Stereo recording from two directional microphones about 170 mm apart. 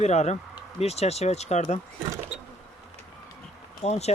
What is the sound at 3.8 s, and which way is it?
Speech, 40° left (ahead or behind).